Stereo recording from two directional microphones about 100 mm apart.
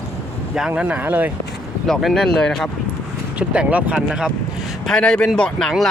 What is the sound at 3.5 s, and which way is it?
Speech, 15° right (ahead or behind).